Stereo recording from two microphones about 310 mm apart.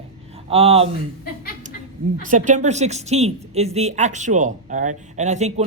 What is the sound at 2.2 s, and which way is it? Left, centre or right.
A woman's voice, right.